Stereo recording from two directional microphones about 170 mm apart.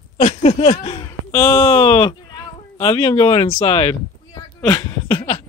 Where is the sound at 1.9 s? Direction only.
20° left (ahead or behind).